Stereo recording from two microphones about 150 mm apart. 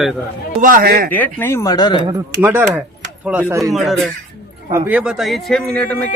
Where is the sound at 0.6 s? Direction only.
75° right (ahead or behind).